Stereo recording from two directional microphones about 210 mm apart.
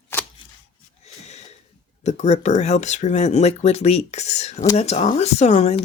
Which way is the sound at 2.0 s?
35° left (ahead or behind).